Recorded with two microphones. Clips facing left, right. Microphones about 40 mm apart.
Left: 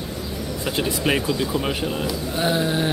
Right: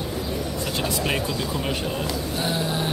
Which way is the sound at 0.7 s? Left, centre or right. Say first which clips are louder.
Left 4 dB; centre.